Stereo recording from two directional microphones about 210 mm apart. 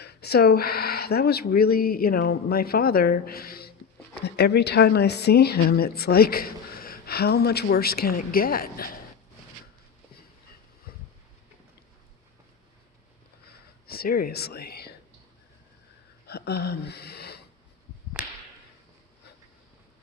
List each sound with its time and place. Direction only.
0.0 s speech: 50° left (ahead or behind)
13.8 s speech: 45° left (ahead or behind)
16.2 s a sound: 50° left (ahead or behind)